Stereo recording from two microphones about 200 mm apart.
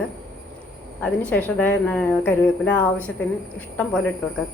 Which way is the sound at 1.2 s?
5° left (ahead or behind).